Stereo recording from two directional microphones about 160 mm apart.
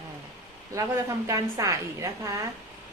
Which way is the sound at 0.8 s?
20° right (ahead or behind).